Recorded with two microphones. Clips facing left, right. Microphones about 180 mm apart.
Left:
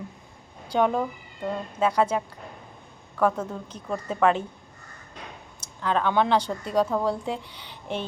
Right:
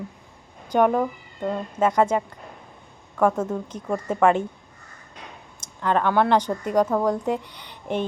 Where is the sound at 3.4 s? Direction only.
25° right (ahead or behind).